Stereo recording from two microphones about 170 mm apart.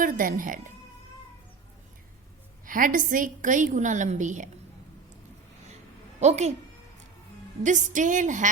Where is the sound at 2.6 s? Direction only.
50° right (ahead or behind).